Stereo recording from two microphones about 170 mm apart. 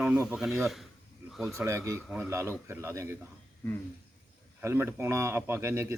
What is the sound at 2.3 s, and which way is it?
Speech, 15° right (ahead or behind).